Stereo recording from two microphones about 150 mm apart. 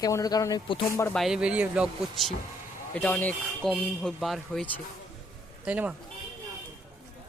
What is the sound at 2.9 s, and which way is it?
Speech, 10° left (ahead or behind).